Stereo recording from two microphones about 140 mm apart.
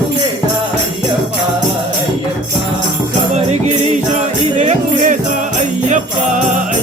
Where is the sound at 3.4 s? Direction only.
55° right (ahead or behind).